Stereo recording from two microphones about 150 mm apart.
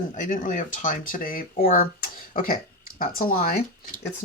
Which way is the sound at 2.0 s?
70° left (ahead or behind).